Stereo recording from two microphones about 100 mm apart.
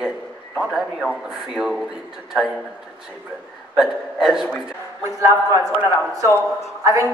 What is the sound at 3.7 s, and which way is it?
Speech, 5° right (ahead or behind).